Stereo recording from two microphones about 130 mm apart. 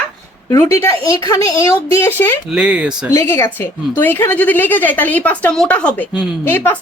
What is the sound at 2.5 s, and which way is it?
Speech, 5° right (ahead or behind).